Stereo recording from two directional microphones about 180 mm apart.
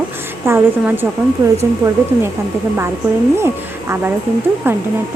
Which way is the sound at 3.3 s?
15° right (ahead or behind).